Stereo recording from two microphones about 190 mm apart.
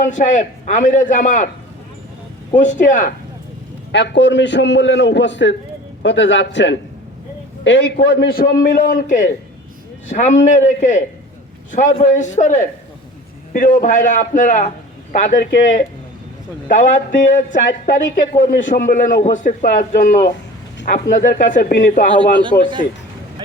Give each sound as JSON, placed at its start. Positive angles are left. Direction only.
{"t": 0.0, "sound": "a man's voice", "side_deg": 40}
{"t": 2.5, "sound": "a man's voice", "side_deg": 40}
{"t": 3.9, "sound": "a man's voice", "side_deg": 65}
{"t": 16.6, "sound": "a man's voice", "side_deg": 45}
{"t": 22.1, "sound": "a man's voice", "side_deg": -25}